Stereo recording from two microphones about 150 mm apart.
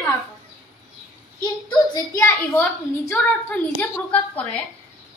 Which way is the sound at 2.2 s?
15° left (ahead or behind).